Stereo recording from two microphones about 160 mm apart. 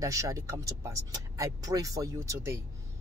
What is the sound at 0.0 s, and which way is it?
Speech, 20° right (ahead or behind).